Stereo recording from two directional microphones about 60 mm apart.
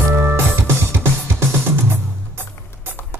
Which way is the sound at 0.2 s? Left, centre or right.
Right.